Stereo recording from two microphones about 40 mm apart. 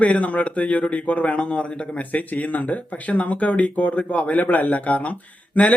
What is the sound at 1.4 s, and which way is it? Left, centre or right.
Speech, left.